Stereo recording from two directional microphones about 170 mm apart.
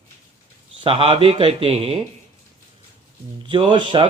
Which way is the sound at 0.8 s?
35° right (ahead or behind).